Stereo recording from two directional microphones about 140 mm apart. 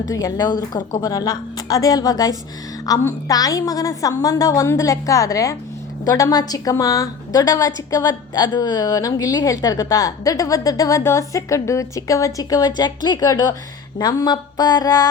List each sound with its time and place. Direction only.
0.0 s a woman's voice: 25° left (ahead or behind)